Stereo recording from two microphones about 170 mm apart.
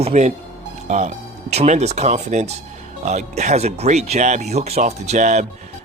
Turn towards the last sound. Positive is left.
turn(degrees=-45)  # may be behind; listen again after turning